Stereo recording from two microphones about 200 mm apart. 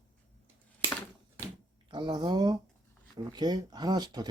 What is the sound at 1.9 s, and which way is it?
Speech, 20° right (ahead or behind).